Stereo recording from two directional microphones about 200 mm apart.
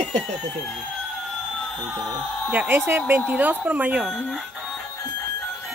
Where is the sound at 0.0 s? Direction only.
Centre (ahead or behind).